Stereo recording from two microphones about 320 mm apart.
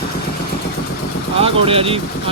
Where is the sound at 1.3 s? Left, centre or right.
Centre.